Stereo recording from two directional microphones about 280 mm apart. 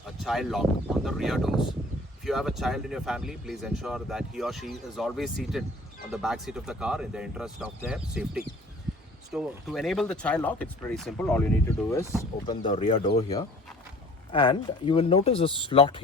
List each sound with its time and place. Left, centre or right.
0.3 s speech: centre